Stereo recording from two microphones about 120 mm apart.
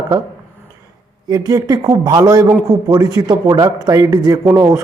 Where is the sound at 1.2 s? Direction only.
30° right (ahead or behind).